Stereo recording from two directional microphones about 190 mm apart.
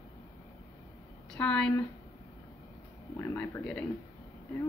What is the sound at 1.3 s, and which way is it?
Speech, 5° left (ahead or behind).